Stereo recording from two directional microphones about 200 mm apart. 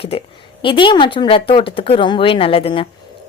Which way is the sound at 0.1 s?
30° left (ahead or behind).